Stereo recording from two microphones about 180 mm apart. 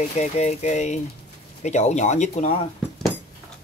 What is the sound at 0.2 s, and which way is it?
Speech, 40° left (ahead or behind).